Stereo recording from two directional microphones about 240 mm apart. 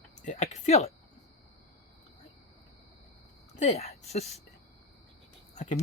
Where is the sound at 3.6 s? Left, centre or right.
Left.